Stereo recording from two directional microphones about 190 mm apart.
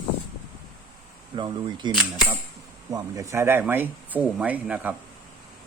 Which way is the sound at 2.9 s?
15° right (ahead or behind).